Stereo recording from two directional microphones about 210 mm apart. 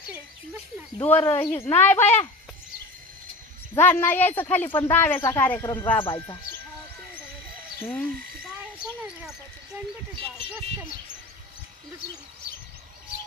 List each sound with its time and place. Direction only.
1.0 s speech: 10° left (ahead or behind)
3.8 s speech: 10° left (ahead or behind)
6.0 s speech: 25° left (ahead or behind)
7.8 s speech: 10° left (ahead or behind)